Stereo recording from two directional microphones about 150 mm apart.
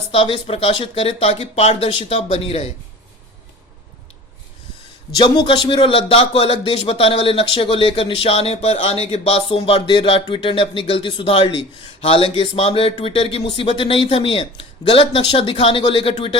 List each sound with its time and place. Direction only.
0.1 s a man's voice: 40° left (ahead or behind)
5.1 s a man's voice: 30° left (ahead or behind)